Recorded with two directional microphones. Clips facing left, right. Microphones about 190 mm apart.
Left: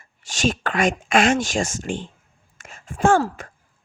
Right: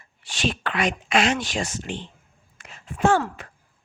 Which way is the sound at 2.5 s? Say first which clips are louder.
Left 2 dB; 45° left (ahead or behind).